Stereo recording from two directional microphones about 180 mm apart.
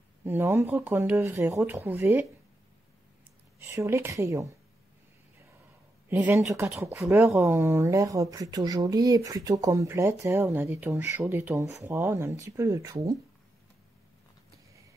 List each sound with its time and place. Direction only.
0.2 s speech: 10° right (ahead or behind)
3.5 s speech: 15° right (ahead or behind)
6.0 s speech: 10° right (ahead or behind)